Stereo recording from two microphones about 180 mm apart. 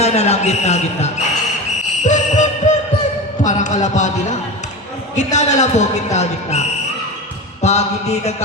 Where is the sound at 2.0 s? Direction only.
40° left (ahead or behind).